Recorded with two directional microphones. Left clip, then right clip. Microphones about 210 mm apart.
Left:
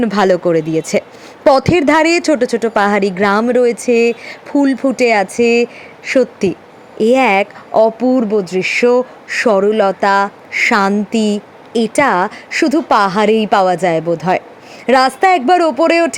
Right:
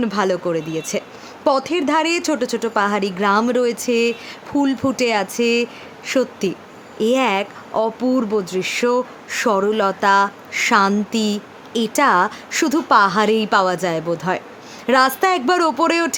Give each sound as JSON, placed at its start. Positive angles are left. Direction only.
{"t": 0.0, "sound": "a woman's voice", "side_deg": 25}